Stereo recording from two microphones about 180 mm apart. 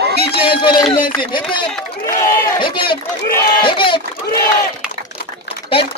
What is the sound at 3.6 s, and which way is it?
Crowd, 30° left (ahead or behind).